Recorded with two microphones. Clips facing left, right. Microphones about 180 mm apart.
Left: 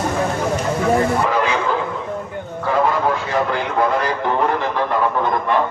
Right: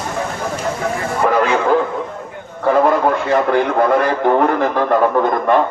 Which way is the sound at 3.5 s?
55° right (ahead or behind).